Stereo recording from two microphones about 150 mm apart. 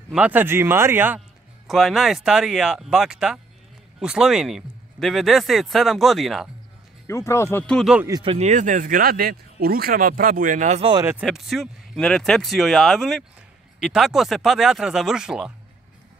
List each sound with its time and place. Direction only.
0.1 s speech: 10° right (ahead or behind)
1.7 s a man's voice: centre (ahead or behind)
7.1 s speech: 20° left (ahead or behind)
8.1 s speech: 35° right (ahead or behind); by 10.8 s 60° right (ahead or behind)
10.8 s speech: 30° right (ahead or behind)
11.2 s a man's voice: centre (ahead or behind)